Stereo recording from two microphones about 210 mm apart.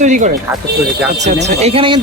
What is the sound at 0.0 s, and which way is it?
Speech, 35° right (ahead or behind).